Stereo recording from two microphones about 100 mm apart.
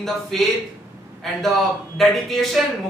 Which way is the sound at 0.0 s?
5° left (ahead or behind).